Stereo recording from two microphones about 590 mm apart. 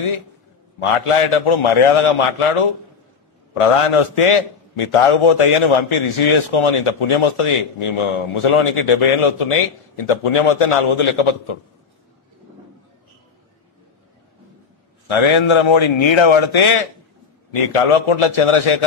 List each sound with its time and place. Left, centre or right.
0.7 s a man's voice: left
15.0 s a man's voice: left